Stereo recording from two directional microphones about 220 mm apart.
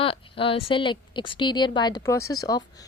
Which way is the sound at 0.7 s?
20° left (ahead or behind).